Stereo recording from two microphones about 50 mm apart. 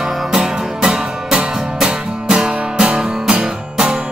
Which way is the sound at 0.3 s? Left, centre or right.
Centre.